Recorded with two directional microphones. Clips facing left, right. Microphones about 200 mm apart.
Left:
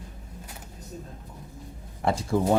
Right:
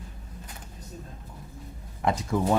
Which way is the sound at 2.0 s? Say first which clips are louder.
Left 1 dB; 30° left (ahead or behind).